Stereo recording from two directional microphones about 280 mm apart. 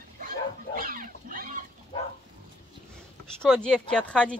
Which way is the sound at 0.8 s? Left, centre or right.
Right.